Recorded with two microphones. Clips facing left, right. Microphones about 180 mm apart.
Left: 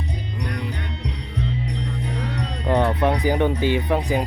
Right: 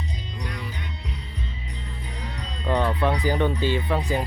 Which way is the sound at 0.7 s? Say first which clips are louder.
Left 6 dB; 65° left (ahead or behind).